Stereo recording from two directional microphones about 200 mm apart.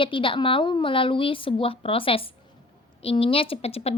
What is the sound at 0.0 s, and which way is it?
A woman's voice, 25° left (ahead or behind).